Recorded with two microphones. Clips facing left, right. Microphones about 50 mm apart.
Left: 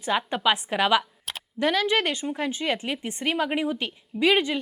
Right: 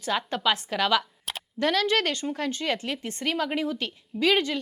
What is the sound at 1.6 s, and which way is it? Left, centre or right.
A woman's voice, centre.